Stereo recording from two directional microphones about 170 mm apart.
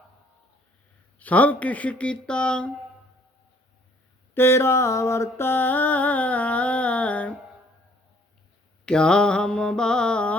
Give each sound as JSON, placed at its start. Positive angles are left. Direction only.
{"t": 1.2, "sound": "mantra", "side_deg": 10}
{"t": 4.4, "sound": "mantra", "side_deg": 15}
{"t": 8.9, "sound": "speech", "side_deg": 5}